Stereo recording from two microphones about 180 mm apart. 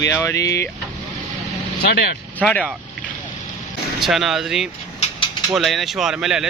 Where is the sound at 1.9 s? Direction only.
65° left (ahead or behind).